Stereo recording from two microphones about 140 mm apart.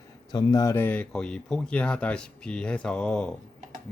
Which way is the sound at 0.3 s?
30° left (ahead or behind).